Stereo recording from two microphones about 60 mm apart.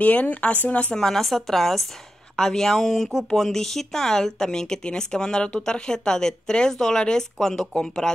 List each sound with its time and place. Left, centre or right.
0.0 s speech: left
0.9 s a woman's voice: centre